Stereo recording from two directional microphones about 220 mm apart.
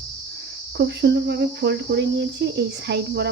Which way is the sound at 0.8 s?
50° right (ahead or behind).